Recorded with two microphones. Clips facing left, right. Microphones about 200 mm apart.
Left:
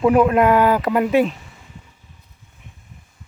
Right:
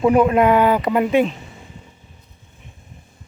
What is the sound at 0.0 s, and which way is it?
Speech, centre (ahead or behind).